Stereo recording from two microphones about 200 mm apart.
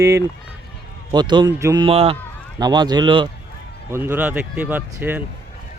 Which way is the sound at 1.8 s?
30° right (ahead or behind).